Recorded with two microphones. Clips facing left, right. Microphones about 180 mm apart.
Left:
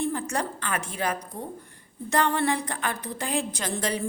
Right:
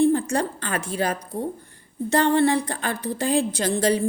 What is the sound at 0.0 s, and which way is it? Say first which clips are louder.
A woman's voice: right 8 dB; 30° right (ahead or behind).